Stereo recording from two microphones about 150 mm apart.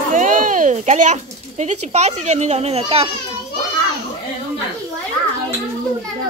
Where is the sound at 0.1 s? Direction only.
60° right (ahead or behind); by 3.1 s 40° right (ahead or behind).